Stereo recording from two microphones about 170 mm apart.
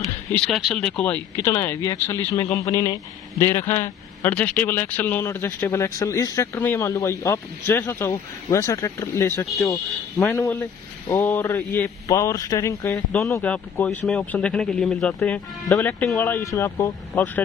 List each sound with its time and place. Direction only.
0.3 s speech: centre (ahead or behind)